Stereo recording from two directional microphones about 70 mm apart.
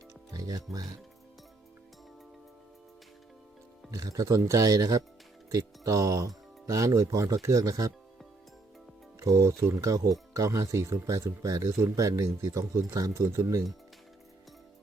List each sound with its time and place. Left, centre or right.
0.3 s speech: right
3.9 s speech: right
9.2 s speech: right
13.2 s speech: right